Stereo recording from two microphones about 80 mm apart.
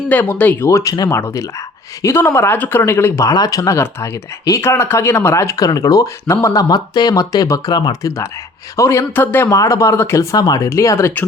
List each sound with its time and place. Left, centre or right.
0.1 s speech: left
0.7 s speech: left
3.2 s speech: left
7.7 s speech: left
8.0 s speech: left
9.1 s speech: left
9.5 s speech: left
10.3 s speech: left
10.7 s speech: left